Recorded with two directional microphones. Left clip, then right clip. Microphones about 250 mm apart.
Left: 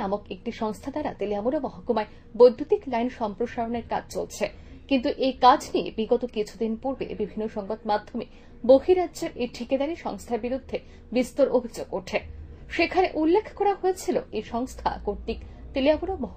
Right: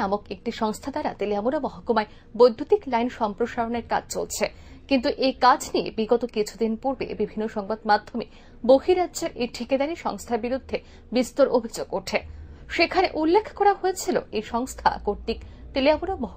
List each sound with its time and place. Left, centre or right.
0.0 s a woman's voice: right